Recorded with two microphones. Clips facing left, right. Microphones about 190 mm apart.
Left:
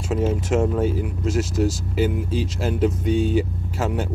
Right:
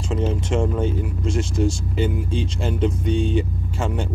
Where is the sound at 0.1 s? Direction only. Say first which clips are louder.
Left 2 dB; 5° left (ahead or behind).